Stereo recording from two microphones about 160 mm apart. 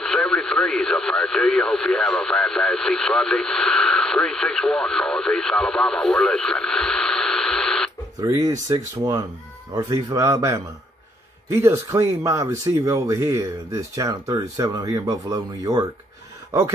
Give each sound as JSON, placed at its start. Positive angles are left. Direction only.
{"t": 0.0, "sound": "radio", "side_deg": 5}
{"t": 8.2, "sound": "speech", "side_deg": -20}